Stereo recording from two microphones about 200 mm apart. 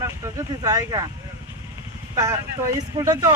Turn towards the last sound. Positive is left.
turn(degrees=-15)  # may be behind; listen again after turning